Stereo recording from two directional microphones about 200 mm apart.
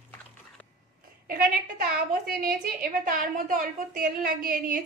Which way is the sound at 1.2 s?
45° right (ahead or behind).